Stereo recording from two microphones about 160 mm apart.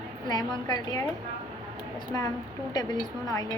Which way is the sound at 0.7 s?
25° left (ahead or behind).